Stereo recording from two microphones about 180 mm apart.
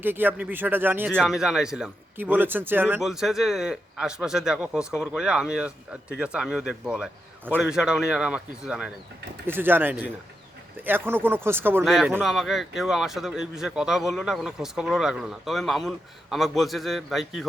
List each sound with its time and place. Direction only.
0.0 s speech: 10° right (ahead or behind)
11.9 s speech: centre (ahead or behind)